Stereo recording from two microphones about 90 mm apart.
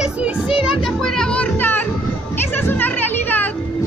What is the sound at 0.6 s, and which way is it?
A child's voice, 5° left (ahead or behind).